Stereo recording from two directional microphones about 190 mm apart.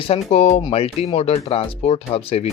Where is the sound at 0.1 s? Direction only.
35° left (ahead or behind).